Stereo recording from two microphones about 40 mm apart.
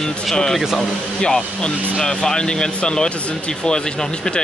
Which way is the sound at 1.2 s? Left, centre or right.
Centre.